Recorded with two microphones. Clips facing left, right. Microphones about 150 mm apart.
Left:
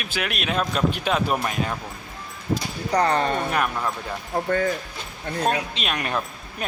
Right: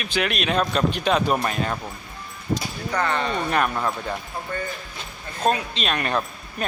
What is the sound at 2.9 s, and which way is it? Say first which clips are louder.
Speech: left 4 dB; 35° left (ahead or behind).